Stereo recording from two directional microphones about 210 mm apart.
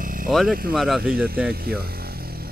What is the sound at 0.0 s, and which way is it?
Vehicle, 40° right (ahead or behind).